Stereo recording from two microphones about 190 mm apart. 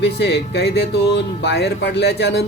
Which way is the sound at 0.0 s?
65° left (ahead or behind).